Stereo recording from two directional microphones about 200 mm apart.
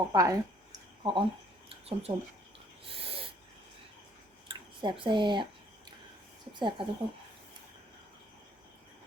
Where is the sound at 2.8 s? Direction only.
30° right (ahead or behind).